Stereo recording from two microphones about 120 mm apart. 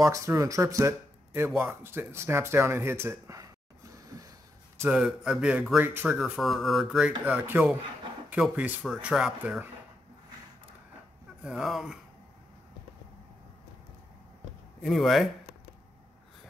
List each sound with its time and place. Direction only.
0.0 s speech: 25° right (ahead or behind)
4.8 s speech: 10° right (ahead or behind)
6.1 s speech: centre (ahead or behind)
11.4 s speech: 5° right (ahead or behind)
14.8 s speech: centre (ahead or behind)